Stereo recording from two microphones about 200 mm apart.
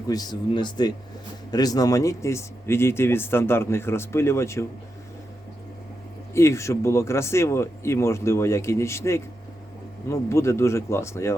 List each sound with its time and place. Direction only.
0.1 s speech: 20° left (ahead or behind)
6.3 s speech: 15° left (ahead or behind)